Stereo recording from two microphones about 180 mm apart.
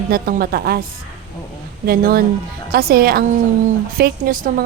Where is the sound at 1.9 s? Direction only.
55° right (ahead or behind).